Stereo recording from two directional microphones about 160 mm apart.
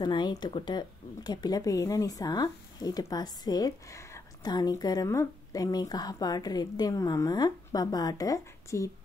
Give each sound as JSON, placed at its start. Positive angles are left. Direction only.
{"t": 0.0, "sound": "speech", "side_deg": 25}